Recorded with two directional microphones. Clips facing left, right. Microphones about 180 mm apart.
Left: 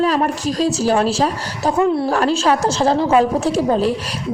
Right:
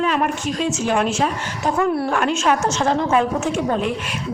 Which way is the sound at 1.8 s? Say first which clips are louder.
Left 4 dB; 20° left (ahead or behind).